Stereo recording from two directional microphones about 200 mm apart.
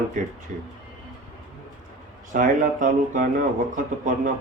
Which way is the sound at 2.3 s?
40° right (ahead or behind).